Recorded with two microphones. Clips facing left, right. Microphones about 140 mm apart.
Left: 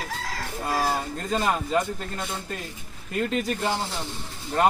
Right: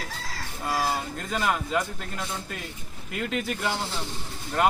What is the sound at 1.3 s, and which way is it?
A man's voice, 30° left (ahead or behind).